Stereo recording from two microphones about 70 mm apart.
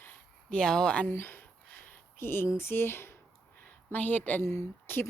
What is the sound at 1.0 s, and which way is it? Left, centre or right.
Speech, left.